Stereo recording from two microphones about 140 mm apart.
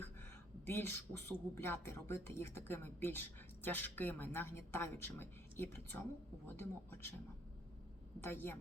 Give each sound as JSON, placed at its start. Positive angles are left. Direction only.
{"t": 0.6, "sound": "a man's voice", "side_deg": 15}
{"t": 8.2, "sound": "a man's voice", "side_deg": 15}